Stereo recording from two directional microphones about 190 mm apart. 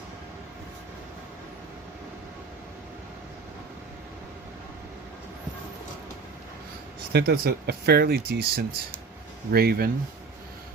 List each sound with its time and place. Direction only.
7.1 s speech: 55° right (ahead or behind)